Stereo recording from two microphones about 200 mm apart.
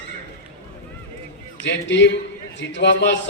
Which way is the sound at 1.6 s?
65° left (ahead or behind).